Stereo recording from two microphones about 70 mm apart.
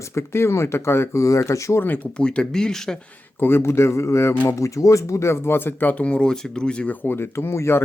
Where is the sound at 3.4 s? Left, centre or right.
Left.